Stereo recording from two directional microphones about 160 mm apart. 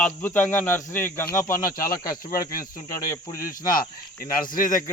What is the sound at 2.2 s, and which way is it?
Speech, 65° left (ahead or behind).